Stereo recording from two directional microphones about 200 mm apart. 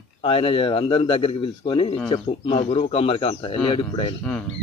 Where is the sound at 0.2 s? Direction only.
30° left (ahead or behind).